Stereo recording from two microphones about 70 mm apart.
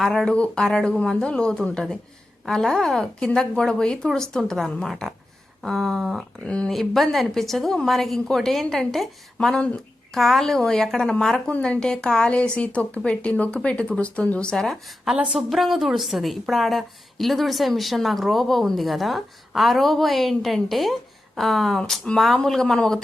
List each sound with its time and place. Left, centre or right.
0.0 s a woman's voice: centre
6.4 s speech: centre
6.7 s a woman's voice: centre
9.6 s speech: centre
10.1 s a woman's voice: centre